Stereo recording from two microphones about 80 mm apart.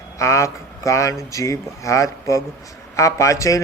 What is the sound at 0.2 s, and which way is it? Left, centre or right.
A man's voice, left.